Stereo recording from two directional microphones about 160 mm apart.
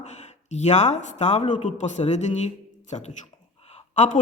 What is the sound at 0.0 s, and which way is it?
A woman's voice, 45° left (ahead or behind).